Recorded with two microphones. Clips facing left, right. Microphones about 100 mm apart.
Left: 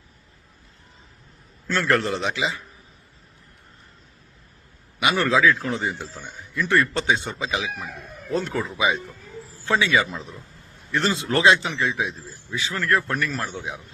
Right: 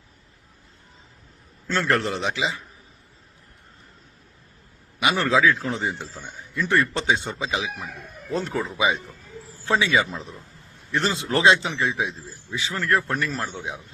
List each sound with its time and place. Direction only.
1.6 s a man's voice: 20° right (ahead or behind)
4.9 s a man's voice: 25° right (ahead or behind)
8.5 s speech: centre (ahead or behind)
9.6 s a man's voice: 25° right (ahead or behind)